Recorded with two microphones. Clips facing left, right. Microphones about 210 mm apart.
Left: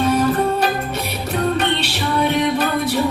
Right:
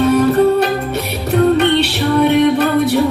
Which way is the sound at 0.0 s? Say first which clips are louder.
Right 6 dB; 65° right (ahead or behind).